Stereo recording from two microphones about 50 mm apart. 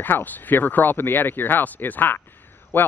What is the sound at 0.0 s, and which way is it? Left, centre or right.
Speech, left.